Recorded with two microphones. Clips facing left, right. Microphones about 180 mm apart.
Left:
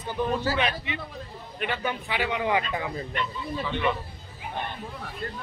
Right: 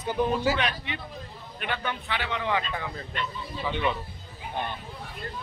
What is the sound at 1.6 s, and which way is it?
A man's voice, 5° left (ahead or behind).